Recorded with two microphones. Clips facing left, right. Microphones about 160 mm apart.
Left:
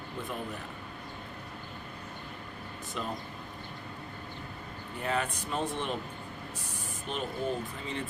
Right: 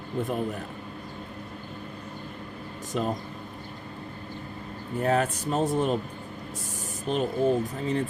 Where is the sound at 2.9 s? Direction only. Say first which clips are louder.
Right 9 dB; 40° right (ahead or behind).